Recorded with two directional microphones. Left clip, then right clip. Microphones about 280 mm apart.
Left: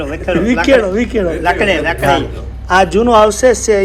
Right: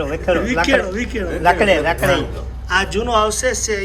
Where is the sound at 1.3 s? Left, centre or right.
Right.